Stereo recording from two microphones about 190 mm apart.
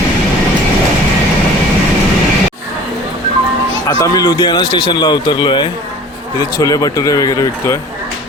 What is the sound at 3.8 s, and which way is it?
A man's voice, 20° left (ahead or behind).